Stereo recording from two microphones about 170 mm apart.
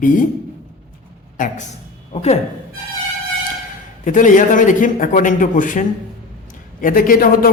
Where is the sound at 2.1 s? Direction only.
40° left (ahead or behind).